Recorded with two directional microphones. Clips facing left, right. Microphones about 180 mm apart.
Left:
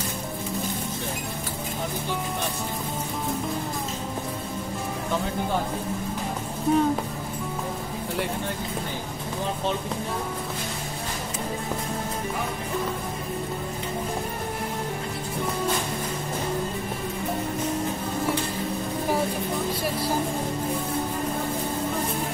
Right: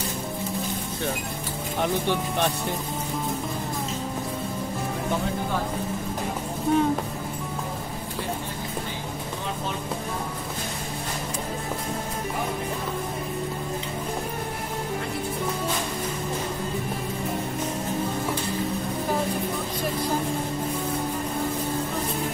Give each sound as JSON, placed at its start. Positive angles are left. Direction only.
{"t": 6.7, "sound": "speech", "side_deg": 5}